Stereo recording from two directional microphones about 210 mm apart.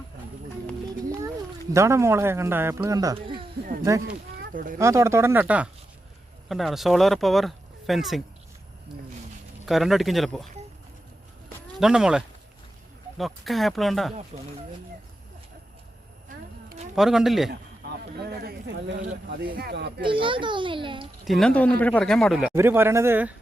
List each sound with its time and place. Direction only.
1.7 s speech: 15° right (ahead or behind)
4.5 s speech: 40° right (ahead or behind)
4.8 s a man's voice: 15° right (ahead or behind)
9.6 s a man's voice: centre (ahead or behind)
11.8 s a man's voice: 5° right (ahead or behind)
14.3 s speech: 35° right (ahead or behind)
16.6 s a sound: 35° right (ahead or behind)
16.9 s a man's voice: centre (ahead or behind)
17.5 s speech: 50° right (ahead or behind)
20.0 s a child's voice: 25° right (ahead or behind)
21.2 s a man's voice: centre (ahead or behind)